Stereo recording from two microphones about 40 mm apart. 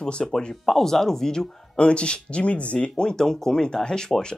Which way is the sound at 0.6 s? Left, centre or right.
Centre.